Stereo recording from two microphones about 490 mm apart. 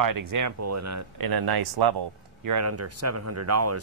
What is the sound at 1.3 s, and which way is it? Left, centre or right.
Speech, right.